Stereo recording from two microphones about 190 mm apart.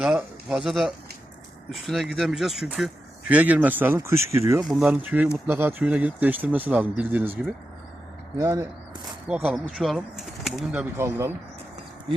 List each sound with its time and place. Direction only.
0.0 s a man's voice: 5° right (ahead or behind)
4.6 s speech: centre (ahead or behind)
9.2 s speech: 5° right (ahead or behind)